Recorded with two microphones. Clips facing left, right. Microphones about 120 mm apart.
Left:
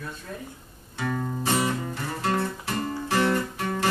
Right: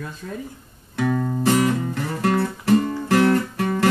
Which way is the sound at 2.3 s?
60° right (ahead or behind).